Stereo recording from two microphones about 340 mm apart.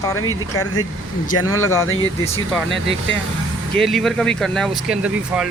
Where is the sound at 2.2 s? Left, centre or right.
Centre.